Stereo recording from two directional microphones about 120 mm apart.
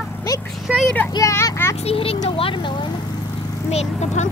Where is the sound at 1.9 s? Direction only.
55° left (ahead or behind).